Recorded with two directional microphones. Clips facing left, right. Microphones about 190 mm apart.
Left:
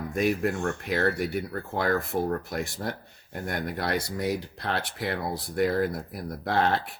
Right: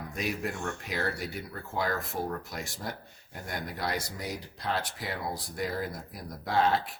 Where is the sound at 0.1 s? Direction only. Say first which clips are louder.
Left 8 dB; 55° left (ahead or behind).